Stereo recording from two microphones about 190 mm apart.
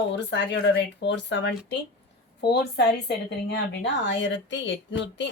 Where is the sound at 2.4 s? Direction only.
60° left (ahead or behind).